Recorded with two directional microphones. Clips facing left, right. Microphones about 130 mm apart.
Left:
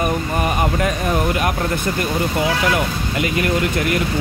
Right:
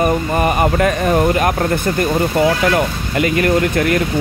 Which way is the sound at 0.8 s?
55° right (ahead or behind).